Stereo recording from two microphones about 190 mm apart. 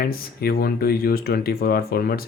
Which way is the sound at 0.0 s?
50° left (ahead or behind).